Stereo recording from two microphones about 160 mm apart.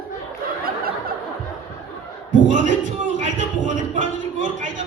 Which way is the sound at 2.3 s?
55° right (ahead or behind).